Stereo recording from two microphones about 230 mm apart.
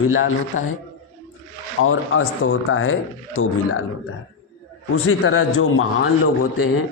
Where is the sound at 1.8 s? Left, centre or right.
Left.